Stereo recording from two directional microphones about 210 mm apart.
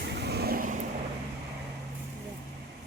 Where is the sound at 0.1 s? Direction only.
50° right (ahead or behind).